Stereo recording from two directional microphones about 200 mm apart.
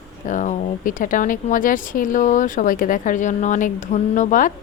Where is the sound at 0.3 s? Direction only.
40° left (ahead or behind).